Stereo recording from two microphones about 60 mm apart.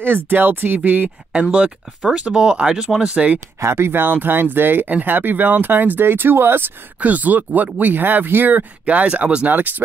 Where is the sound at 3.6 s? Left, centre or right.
Right.